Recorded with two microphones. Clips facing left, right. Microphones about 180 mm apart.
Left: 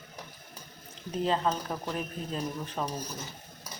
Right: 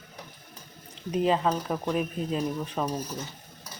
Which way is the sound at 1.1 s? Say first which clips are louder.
Right 4 dB; 10° right (ahead or behind).